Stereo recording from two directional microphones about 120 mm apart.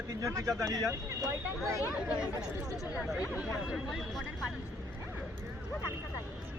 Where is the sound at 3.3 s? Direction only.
10° right (ahead or behind).